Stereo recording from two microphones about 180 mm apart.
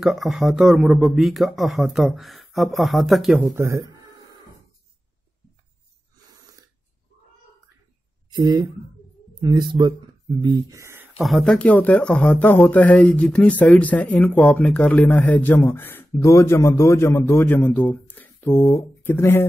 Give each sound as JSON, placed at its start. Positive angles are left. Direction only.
{"t": 0.0, "sound": "speech", "side_deg": 0}
{"t": 3.4, "sound": "speech", "side_deg": -15}
{"t": 8.3, "sound": "speech", "side_deg": -25}
{"t": 11.1, "sound": "speech", "side_deg": 0}